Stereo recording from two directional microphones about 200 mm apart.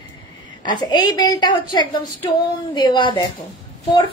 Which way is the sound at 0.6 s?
20° left (ahead or behind).